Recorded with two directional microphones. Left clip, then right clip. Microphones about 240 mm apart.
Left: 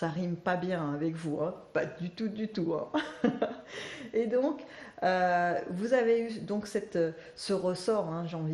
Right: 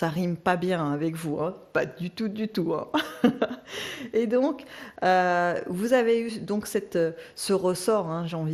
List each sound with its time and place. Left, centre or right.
0.0 s speech: right